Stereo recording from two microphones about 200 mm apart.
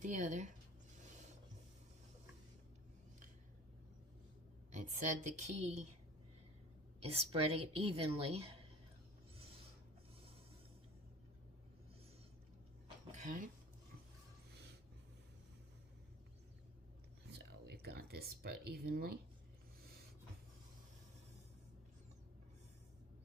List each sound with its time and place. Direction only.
0.0 s a woman's voice: 40° right (ahead or behind)
1.0 s rub: 35° right (ahead or behind)
4.7 s a woman's voice: 40° right (ahead or behind)
7.0 s a woman's voice: 30° right (ahead or behind)
13.1 s a sound: 40° right (ahead or behind)
17.2 s a sound: 55° right (ahead or behind)